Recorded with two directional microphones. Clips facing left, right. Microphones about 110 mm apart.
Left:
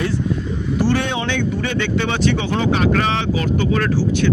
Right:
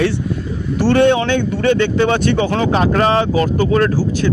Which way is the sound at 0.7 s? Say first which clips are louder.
Right 8 dB; 60° right (ahead or behind).